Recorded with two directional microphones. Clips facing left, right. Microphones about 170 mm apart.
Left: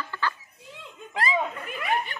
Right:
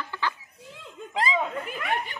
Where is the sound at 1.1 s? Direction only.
20° right (ahead or behind).